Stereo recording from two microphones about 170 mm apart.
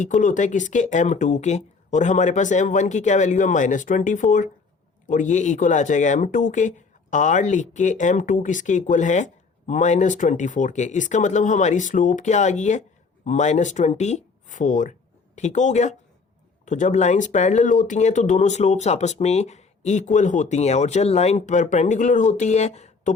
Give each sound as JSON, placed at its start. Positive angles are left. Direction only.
{"t": 0.0, "sound": "speech", "side_deg": 50}